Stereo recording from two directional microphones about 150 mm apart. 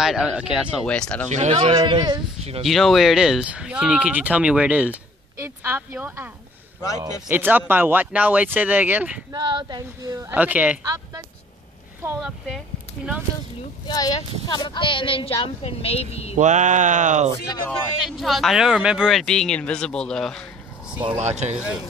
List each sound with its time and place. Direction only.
0.0 s speech: 5° right (ahead or behind)
0.8 s speech: 5° left (ahead or behind)
1.3 s speech: 45° right (ahead or behind)
1.8 s speech: 30° right (ahead or behind)
2.6 s speech: centre (ahead or behind)
9.3 s speech: 30° right (ahead or behind)
10.3 s speech: 10° right (ahead or behind)
10.8 s a woman's voice: 20° right (ahead or behind)
13.8 s speech: 25° left (ahead or behind); by 16.3 s 45° left (ahead or behind)
16.3 s a sound: 55° right (ahead or behind)
17.6 s speech: centre (ahead or behind)
21.2 s speech: 50° right (ahead or behind)